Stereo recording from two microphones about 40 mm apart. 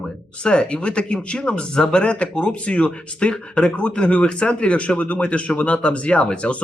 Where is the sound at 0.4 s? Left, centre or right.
Left.